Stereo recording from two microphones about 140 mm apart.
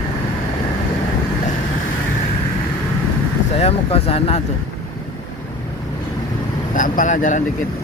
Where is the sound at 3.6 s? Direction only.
45° left (ahead or behind).